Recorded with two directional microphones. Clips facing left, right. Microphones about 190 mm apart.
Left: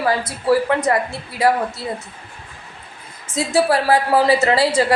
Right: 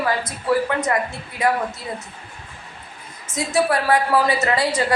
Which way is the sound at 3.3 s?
30° left (ahead or behind).